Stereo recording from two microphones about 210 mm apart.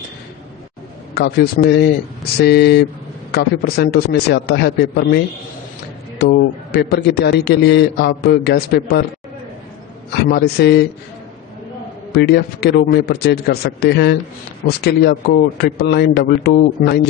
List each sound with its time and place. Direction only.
1.1 s a man's voice: 50° left (ahead or behind)
10.2 s a man's voice: 50° left (ahead or behind)
12.1 s a man's voice: 50° left (ahead or behind)